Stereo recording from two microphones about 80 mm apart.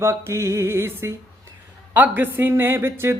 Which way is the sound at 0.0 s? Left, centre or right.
Right.